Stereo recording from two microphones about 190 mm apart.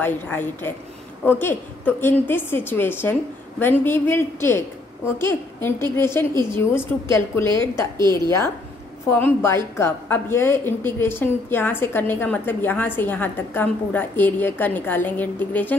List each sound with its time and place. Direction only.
0.0 s a woman's voice: 10° left (ahead or behind)